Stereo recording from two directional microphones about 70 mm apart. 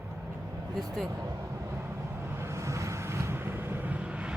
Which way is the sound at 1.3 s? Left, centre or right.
Right.